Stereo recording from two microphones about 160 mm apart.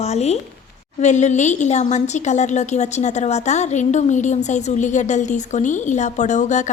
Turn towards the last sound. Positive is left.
turn(degrees=50)  # may be behind; listen again after turning